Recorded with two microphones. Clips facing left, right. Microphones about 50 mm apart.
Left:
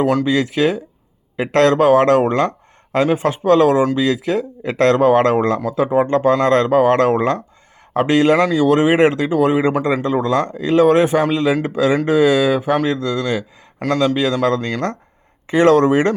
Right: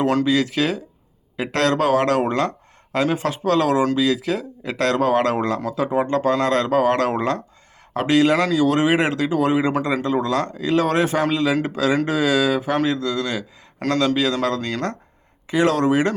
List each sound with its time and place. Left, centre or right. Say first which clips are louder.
0.0 s speech: left 3 dB; centre
0.3 s speech: left 3 dB; left